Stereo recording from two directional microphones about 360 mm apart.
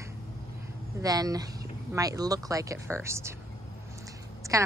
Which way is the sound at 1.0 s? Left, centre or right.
Centre.